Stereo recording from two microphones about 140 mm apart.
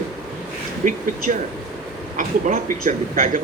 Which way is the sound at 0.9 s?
70° right (ahead or behind).